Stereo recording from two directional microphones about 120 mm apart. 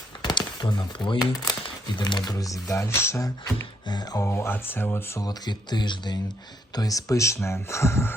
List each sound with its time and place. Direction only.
0.2 s speech: 40° left (ahead or behind)
4.3 s speech: 20° left (ahead or behind)